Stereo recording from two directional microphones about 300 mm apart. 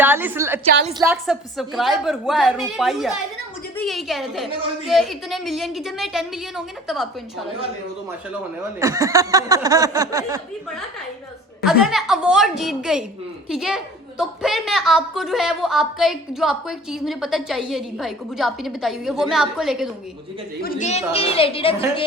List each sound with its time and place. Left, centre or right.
0.0 s a woman's voice: centre
8.8 s a sound: centre
11.6 s a woman's voice: centre
20.6 s a woman's voice: left